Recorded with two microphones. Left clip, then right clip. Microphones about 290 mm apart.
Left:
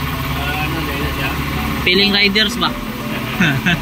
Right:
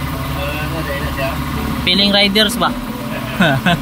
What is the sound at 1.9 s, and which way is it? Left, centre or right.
Speech, centre.